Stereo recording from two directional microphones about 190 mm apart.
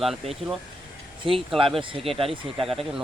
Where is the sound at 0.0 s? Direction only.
Centre (ahead or behind).